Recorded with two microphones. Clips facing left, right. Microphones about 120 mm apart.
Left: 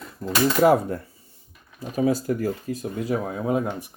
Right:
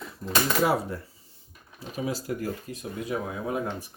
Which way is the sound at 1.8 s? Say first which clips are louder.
Left 9 dB; 45° left (ahead or behind).